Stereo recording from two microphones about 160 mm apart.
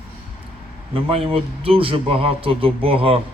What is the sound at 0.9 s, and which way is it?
A man's voice, 35° right (ahead or behind).